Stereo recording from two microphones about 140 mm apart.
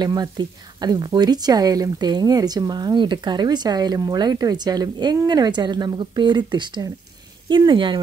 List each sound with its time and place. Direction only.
0.0 s speech: 30° right (ahead or behind)